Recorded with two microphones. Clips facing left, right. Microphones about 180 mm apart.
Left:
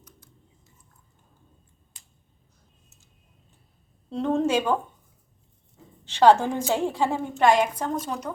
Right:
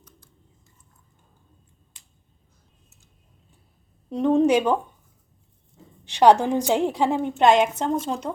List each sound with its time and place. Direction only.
4.1 s a woman's voice: 15° right (ahead or behind)
6.1 s a woman's voice: 15° right (ahead or behind)